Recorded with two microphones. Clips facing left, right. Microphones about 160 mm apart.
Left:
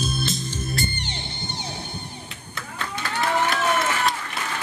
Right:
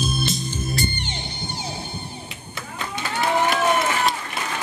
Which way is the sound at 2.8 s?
15° right (ahead or behind).